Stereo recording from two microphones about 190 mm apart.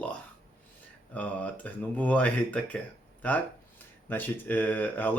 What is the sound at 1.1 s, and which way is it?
Speech, 10° left (ahead or behind).